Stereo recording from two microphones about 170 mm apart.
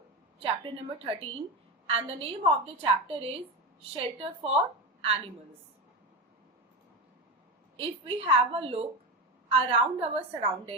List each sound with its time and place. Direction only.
0.3 s a woman's voice: 35° right (ahead or behind)
7.8 s a woman's voice: 35° right (ahead or behind)